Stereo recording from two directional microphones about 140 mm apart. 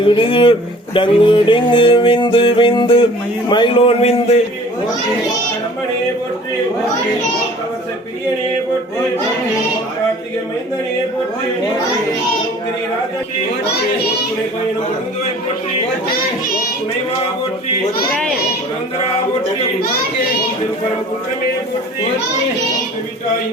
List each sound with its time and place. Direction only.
0.0 s music: 40° left (ahead or behind)
18.1 s a child's voice: centre (ahead or behind)